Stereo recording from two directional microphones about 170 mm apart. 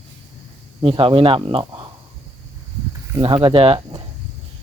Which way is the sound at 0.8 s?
30° right (ahead or behind).